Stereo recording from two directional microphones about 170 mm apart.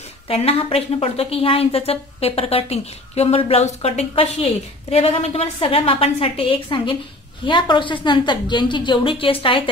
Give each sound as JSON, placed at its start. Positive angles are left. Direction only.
{"t": 0.3, "sound": "a woman's voice", "side_deg": 35}